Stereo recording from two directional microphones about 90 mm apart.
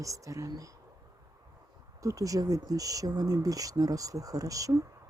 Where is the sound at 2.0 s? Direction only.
40° right (ahead or behind).